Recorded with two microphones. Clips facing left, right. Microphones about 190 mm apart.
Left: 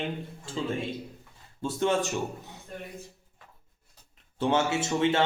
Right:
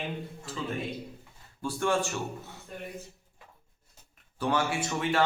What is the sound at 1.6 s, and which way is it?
Speech, 20° left (ahead or behind).